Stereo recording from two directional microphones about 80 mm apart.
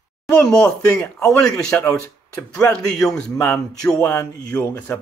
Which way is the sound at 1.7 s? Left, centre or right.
Centre.